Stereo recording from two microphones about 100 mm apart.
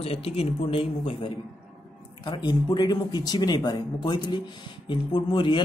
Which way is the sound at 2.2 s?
50° left (ahead or behind).